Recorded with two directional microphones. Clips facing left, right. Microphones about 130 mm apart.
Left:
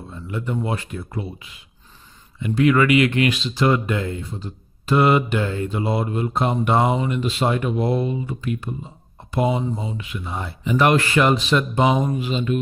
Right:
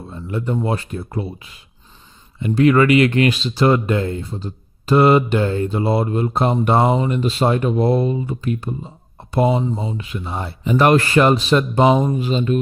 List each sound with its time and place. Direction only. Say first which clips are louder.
0.1 s speech: right 4 dB; 35° right (ahead or behind)